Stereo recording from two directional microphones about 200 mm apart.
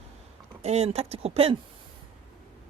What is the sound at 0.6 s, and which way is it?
Speech, 30° right (ahead or behind).